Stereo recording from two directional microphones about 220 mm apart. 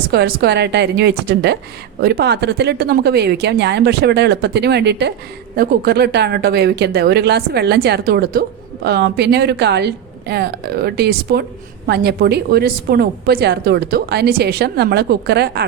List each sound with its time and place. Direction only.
0.1 s a woman's voice: 45° right (ahead or behind)